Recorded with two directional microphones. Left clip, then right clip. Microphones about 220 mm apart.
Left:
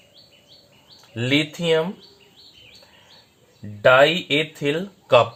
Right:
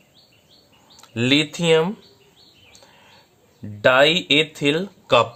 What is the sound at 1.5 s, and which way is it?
Speech, 30° right (ahead or behind).